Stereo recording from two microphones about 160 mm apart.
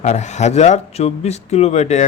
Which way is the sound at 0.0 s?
45° left (ahead or behind).